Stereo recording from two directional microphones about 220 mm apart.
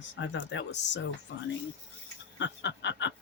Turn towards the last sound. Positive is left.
turn(degrees=55)  # may be behind; listen again after turning